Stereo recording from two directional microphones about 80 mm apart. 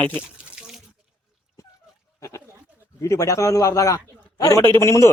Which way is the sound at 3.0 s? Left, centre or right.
Left.